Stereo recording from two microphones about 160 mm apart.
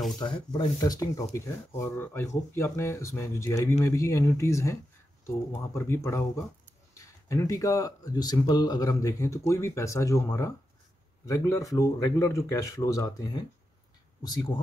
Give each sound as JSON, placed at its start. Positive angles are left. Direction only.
{"t": 0.2, "sound": "speech", "side_deg": 30}